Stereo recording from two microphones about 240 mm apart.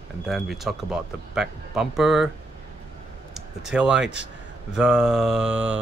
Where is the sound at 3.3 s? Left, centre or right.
Centre.